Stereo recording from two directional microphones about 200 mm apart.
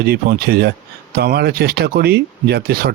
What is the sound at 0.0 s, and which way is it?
Speech, 50° right (ahead or behind).